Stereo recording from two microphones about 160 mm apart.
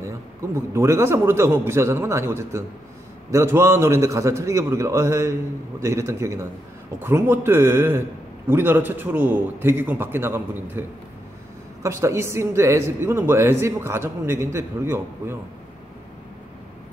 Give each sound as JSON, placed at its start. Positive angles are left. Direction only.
{"t": 0.6, "sound": "speech", "side_deg": -15}